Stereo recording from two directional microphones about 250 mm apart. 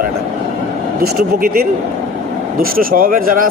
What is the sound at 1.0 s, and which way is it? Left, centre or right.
A man's voice, right.